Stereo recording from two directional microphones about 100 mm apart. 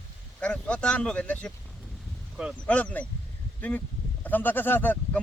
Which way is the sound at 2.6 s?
15° left (ahead or behind).